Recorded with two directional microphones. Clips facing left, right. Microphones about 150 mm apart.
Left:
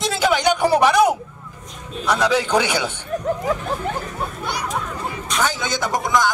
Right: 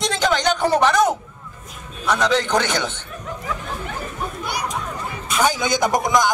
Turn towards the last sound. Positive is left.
turn(degrees=-15)  # may be behind; listen again after turning